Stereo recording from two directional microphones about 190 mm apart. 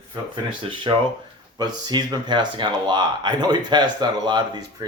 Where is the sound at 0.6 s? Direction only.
25° right (ahead or behind).